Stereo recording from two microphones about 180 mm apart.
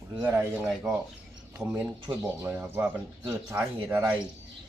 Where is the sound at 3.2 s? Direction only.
20° right (ahead or behind).